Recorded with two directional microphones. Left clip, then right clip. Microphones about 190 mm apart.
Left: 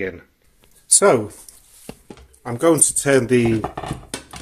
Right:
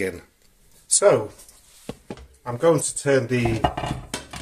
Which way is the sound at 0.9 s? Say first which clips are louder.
Left 2 dB; 55° left (ahead or behind).